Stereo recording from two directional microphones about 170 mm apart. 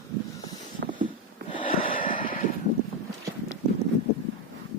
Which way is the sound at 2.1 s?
55° left (ahead or behind).